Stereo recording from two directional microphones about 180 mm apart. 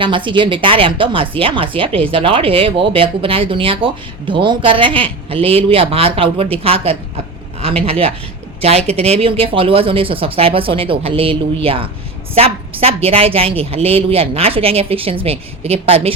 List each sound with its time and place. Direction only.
0.0 s a woman's voice: 25° right (ahead or behind)